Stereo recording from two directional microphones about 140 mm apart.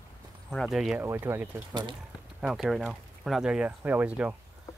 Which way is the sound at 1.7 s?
30° right (ahead or behind).